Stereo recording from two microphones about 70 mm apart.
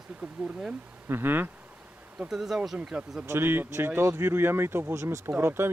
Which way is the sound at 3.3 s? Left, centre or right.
Right.